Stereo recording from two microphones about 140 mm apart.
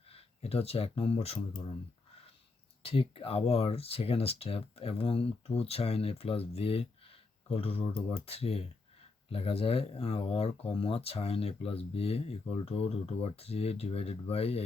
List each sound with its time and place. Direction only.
0.1 s speech: 45° left (ahead or behind)
2.8 s speech: 40° left (ahead or behind)